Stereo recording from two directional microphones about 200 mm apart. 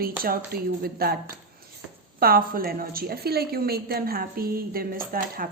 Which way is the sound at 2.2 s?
45° right (ahead or behind).